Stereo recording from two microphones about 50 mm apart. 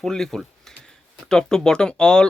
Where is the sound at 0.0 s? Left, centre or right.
Centre.